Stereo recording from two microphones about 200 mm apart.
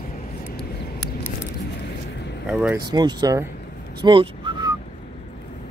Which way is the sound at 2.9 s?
20° right (ahead or behind).